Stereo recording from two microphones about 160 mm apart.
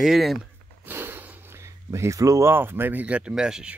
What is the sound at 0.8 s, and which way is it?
Speech, 10° right (ahead or behind).